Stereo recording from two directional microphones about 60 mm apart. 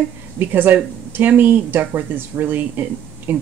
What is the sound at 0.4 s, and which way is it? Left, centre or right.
Speech, right.